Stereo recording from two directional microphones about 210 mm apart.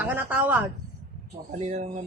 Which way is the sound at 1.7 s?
35° right (ahead or behind).